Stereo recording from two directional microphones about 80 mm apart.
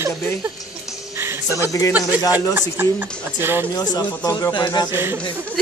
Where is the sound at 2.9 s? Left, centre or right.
Right.